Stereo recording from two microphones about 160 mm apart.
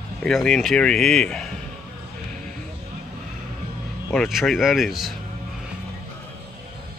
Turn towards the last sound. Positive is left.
turn(degrees=0)  # may be behind; listen again after turning